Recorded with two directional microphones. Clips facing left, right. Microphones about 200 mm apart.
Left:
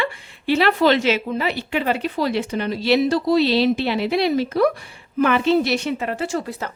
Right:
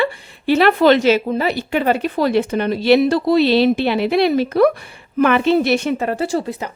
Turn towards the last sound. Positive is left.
turn(degrees=-35)  # may be behind; listen again after turning